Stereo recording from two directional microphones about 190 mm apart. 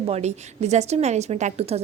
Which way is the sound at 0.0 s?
35° right (ahead or behind).